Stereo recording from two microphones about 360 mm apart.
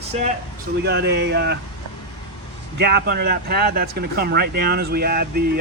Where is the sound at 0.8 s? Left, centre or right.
Right.